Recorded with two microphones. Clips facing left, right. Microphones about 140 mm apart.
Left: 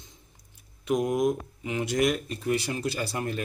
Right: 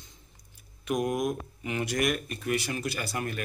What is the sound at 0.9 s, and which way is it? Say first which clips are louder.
Speech: left 4 dB; 25° left (ahead or behind).